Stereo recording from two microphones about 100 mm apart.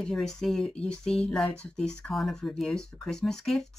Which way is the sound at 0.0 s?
5° left (ahead or behind).